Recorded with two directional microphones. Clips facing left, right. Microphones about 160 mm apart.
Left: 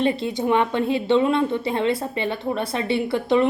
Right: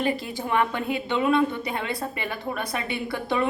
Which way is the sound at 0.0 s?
25° left (ahead or behind).